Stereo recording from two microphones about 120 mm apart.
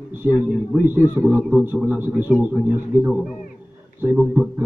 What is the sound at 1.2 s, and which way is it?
A man's voice, 15° right (ahead or behind).